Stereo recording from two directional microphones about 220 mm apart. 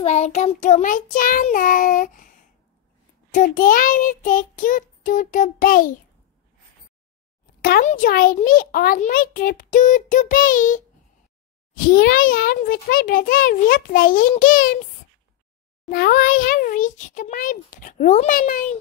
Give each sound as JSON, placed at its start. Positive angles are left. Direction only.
{"t": 0.0, "sound": "a child's voice", "side_deg": 30}
{"t": 7.6, "sound": "a child's voice", "side_deg": 40}
{"t": 15.9, "sound": "a child's voice", "side_deg": 40}